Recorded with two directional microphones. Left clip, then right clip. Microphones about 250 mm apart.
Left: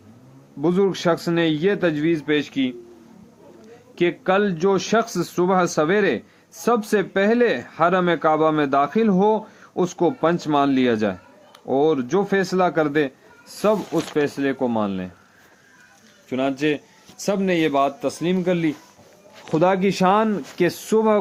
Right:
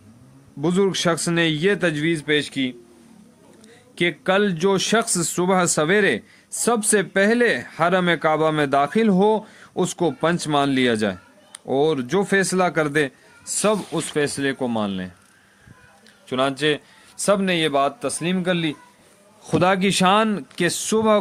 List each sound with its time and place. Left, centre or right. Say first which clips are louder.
0.6 s speech: even; right
3.9 s speech: even; right
16.3 s a man's voice: right 2 dB; right
19.5 s speech: even; right